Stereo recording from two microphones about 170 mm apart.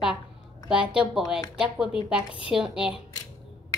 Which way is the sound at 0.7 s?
5° right (ahead or behind).